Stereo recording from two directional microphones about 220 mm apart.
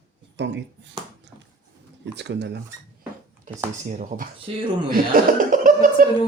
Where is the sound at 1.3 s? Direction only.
55° right (ahead or behind).